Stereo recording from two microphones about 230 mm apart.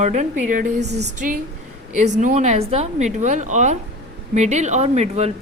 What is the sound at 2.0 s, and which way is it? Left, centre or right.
A woman's voice, right.